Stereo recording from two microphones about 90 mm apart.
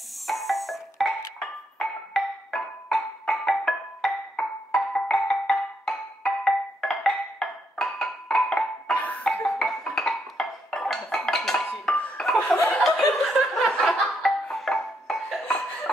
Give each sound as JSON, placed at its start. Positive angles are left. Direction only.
{"t": 0.3, "sound": "music", "side_deg": 0}
{"t": 1.4, "sound": "marimba", "side_deg": 5}
{"t": 8.9, "sound": "music", "side_deg": 15}
{"t": 12.4, "sound": "chuckle", "side_deg": 30}
{"t": 12.7, "sound": "music", "side_deg": 0}